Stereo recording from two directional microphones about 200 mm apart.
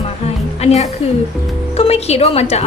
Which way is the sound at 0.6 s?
30° left (ahead or behind).